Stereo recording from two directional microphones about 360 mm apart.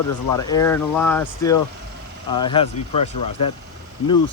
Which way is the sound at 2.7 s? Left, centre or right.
Left.